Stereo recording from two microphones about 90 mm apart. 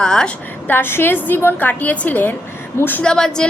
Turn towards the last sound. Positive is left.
turn(degrees=10)  # may be behind; listen again after turning